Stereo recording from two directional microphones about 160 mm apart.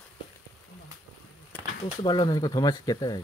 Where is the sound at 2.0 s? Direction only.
25° left (ahead or behind).